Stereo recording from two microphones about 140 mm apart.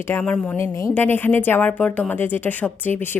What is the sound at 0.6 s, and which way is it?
A woman's voice, 20° left (ahead or behind).